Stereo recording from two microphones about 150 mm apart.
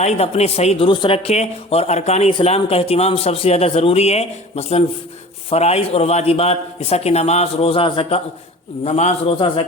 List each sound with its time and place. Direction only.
0.0 s a man's voice: 45° left (ahead or behind)